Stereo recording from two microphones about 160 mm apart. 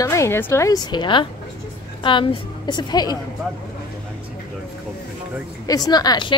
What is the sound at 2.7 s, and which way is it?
Speech, 25° left (ahead or behind).